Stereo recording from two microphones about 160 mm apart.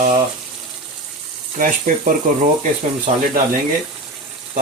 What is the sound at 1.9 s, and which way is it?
Sizzle, 60° right (ahead or behind).